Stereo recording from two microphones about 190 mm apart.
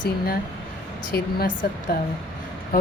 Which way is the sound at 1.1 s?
50° left (ahead or behind).